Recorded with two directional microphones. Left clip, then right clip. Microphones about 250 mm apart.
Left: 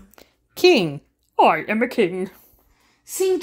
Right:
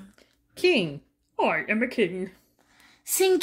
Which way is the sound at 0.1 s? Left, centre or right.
Left.